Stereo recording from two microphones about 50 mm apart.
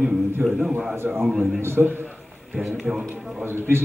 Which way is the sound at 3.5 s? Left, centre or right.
Right.